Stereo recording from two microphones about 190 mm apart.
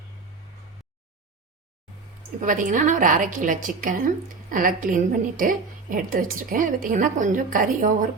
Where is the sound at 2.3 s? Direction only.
45° right (ahead or behind).